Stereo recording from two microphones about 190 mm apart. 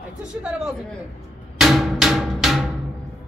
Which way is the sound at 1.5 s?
Centre (ahead or behind).